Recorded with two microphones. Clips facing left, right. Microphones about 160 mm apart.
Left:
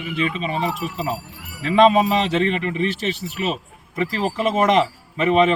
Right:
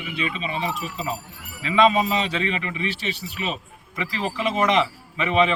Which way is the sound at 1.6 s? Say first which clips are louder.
Left 4 dB; 50° left (ahead or behind).